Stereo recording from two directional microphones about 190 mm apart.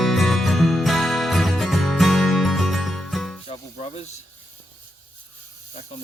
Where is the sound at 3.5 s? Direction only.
30° left (ahead or behind).